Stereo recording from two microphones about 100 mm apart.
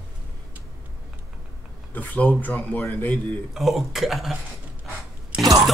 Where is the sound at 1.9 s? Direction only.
20° left (ahead or behind).